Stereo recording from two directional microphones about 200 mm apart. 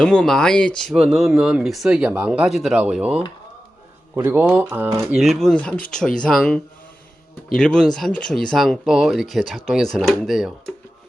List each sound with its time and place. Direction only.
0.0 s speech: centre (ahead or behind); by 5.0 s 15° right (ahead or behind)
5.1 s speech: centre (ahead or behind)